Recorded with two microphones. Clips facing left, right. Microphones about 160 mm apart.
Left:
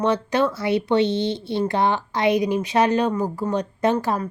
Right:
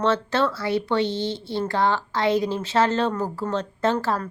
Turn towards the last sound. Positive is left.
turn(degrees=15)  # may be behind; listen again after turning